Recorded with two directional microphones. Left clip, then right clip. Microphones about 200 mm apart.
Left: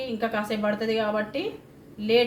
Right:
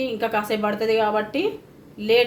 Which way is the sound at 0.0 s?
35° right (ahead or behind).